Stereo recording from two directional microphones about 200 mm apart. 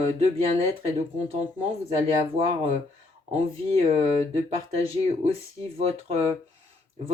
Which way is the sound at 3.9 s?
30° right (ahead or behind).